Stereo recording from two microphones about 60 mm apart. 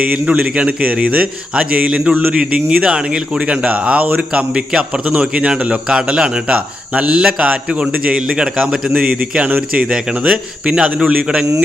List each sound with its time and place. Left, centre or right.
0.0 s a man's voice: right
9.9 s speech: centre